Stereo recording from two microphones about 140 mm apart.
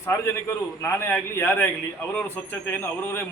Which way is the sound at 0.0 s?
20° left (ahead or behind).